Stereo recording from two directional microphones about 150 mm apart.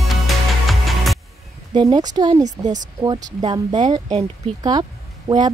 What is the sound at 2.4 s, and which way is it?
Speech, 55° right (ahead or behind).